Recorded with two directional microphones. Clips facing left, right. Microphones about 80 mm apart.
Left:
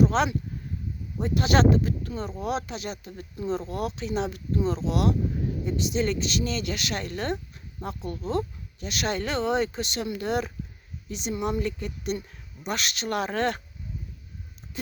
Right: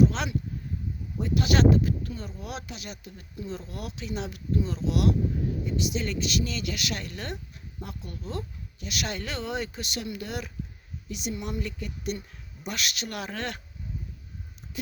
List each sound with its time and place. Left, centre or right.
0.0 s speech: left